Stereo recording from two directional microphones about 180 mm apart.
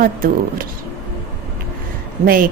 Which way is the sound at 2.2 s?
50° right (ahead or behind).